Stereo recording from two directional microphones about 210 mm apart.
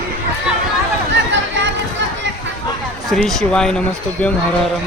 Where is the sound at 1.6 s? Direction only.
60° right (ahead or behind).